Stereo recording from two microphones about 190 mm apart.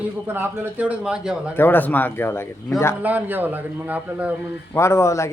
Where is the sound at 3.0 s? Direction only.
10° right (ahead or behind).